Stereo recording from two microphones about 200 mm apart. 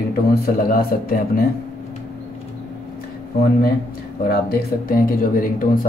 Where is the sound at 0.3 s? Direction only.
45° left (ahead or behind).